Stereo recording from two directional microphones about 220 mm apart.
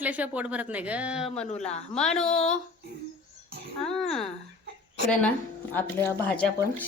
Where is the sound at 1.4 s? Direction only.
30° left (ahead or behind).